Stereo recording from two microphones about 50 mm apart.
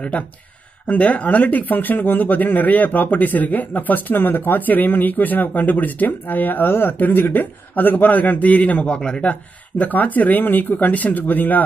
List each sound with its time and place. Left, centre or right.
0.8 s speech: left
8.8 s speech: centre
9.3 s speech: left